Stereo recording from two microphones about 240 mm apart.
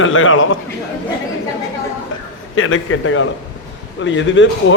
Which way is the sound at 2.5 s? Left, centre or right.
Left.